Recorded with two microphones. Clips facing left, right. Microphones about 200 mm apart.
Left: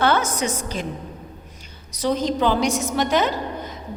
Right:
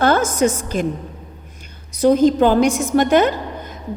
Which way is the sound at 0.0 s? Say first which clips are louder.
Right 5 dB; 45° right (ahead or behind).